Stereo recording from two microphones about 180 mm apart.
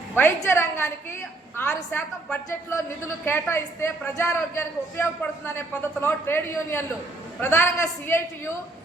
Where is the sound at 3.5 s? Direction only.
15° left (ahead or behind).